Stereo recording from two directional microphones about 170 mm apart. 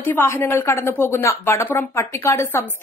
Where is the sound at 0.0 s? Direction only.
15° left (ahead or behind).